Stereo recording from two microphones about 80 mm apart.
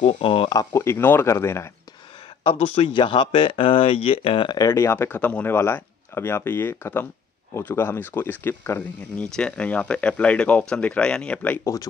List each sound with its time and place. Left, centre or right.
0.2 s speech: left
0.7 s speech: left
2.4 s speech: left
4.6 s speech: left
9.2 s speech: centre
11.6 s speech: left